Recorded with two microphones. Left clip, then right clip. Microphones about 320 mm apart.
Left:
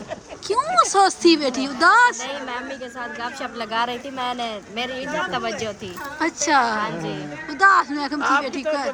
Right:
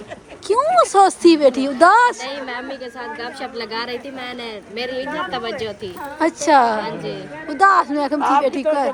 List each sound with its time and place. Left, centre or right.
0.4 s speech: centre
3.4 s speech: centre
8.2 s speech: right